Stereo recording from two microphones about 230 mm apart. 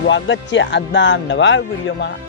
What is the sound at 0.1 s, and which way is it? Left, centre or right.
Speech, left.